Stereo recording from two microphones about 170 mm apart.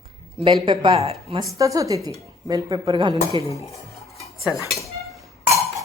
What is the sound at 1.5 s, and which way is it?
A woman's voice, 20° right (ahead or behind).